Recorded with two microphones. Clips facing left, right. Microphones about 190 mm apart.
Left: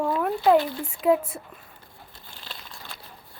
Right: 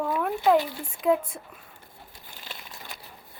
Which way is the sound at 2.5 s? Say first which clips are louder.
Even; 20° right (ahead or behind).